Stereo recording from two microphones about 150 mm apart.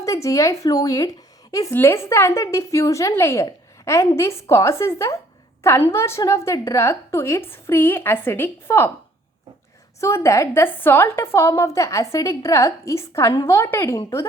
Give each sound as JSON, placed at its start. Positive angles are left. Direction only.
{"t": 0.0, "sound": "a woman's voice", "side_deg": 20}
{"t": 10.0, "sound": "speech", "side_deg": 20}